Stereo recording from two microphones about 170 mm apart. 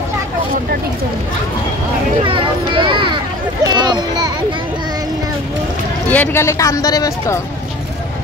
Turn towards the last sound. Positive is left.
turn(degrees=20)  # may be behind; listen again after turning